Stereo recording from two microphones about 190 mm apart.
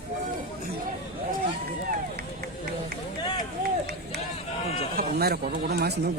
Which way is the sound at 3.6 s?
60° right (ahead or behind).